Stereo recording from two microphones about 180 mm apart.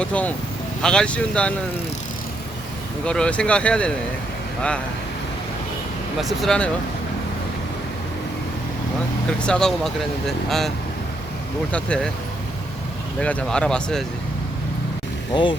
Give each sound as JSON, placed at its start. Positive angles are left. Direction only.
{"t": 0.0, "sound": "speech", "side_deg": 5}
{"t": 3.0, "sound": "speech", "side_deg": 5}
{"t": 6.1, "sound": "speech", "side_deg": 0}
{"t": 9.4, "sound": "speech", "side_deg": 5}
{"t": 11.7, "sound": "speech", "side_deg": 5}
{"t": 13.1, "sound": "speech", "side_deg": 5}
{"t": 15.3, "sound": "speech", "side_deg": 25}